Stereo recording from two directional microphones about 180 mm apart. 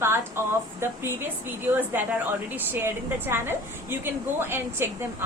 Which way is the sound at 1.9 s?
10° right (ahead or behind).